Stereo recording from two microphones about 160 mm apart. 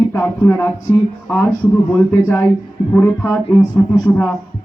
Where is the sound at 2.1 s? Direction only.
15° left (ahead or behind).